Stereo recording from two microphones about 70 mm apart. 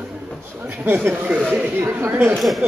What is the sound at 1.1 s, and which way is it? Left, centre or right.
Speech, centre.